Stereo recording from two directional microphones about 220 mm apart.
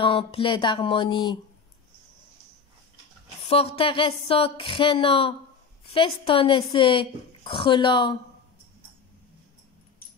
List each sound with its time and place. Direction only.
0.0 s a woman's voice: 25° left (ahead or behind)
3.4 s a woman's voice: 25° left (ahead or behind)